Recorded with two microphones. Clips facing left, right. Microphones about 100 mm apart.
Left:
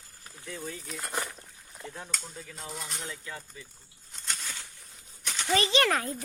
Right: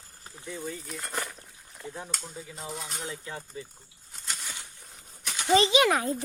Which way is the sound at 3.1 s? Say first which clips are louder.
Right 3 dB; 25° right (ahead or behind).